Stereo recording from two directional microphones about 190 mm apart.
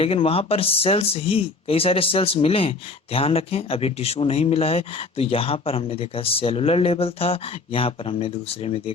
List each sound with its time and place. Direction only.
0.0 s speech: 30° left (ahead or behind)